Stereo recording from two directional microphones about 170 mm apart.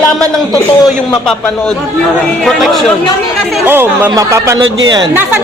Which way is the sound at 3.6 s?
15° right (ahead or behind).